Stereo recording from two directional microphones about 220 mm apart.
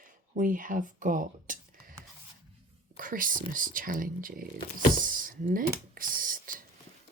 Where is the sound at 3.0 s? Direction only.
40° right (ahead or behind).